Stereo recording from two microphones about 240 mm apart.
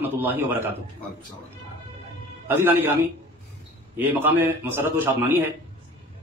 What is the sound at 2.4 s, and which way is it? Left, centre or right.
Speech, centre.